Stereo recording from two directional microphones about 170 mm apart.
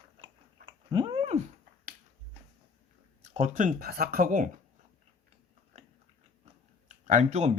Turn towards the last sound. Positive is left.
turn(degrees=-45)  # may be behind; listen again after turning